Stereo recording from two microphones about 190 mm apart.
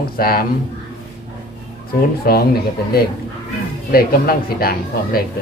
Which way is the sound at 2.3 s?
55° left (ahead or behind).